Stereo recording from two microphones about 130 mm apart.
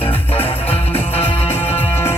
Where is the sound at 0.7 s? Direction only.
50° left (ahead or behind).